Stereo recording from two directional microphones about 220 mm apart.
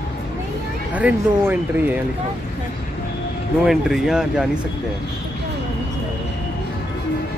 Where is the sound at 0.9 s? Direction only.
10° right (ahead or behind).